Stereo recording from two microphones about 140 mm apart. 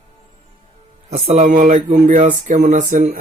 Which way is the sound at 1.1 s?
50° right (ahead or behind).